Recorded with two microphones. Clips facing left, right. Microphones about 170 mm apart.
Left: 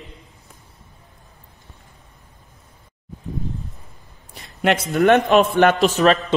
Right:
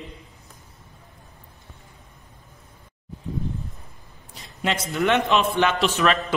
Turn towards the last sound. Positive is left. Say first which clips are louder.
# left 6 dB
turn(degrees=40)  # may be behind; listen again after turning